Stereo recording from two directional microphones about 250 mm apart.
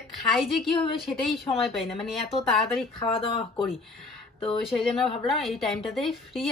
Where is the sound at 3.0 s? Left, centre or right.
Left.